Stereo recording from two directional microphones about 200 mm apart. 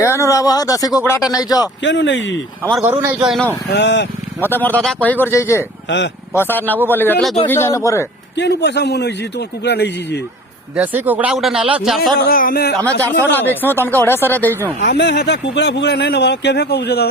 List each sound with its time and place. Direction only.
0.0 s a man's voice: 15° left (ahead or behind)
1.8 s speech: 65° left (ahead or behind)
2.8 s speech: 10° right (ahead or behind)
3.7 s speech: 60° left (ahead or behind)
4.4 s speech: 10° left (ahead or behind)
8.4 s speech: 60° left (ahead or behind)
10.8 s speech: 10° right (ahead or behind)
12.3 s speech: 45° left (ahead or behind)
13.1 s speech: 10° left (ahead or behind)
14.5 s speech: 10° right (ahead or behind)
14.8 s speech: 55° left (ahead or behind)